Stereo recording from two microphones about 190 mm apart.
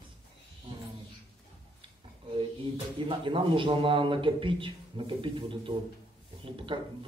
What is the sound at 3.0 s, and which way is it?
A man's voice, 25° right (ahead or behind).